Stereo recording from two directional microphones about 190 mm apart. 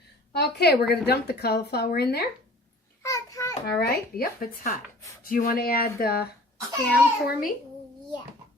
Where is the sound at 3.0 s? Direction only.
15° left (ahead or behind).